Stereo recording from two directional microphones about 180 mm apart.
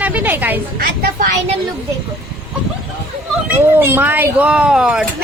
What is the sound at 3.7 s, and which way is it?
Speech, 10° right (ahead or behind).